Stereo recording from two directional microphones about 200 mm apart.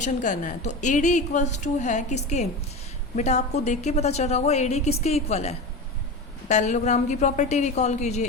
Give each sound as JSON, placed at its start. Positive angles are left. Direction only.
{"t": 0.0, "sound": "a woman's voice", "side_deg": 40}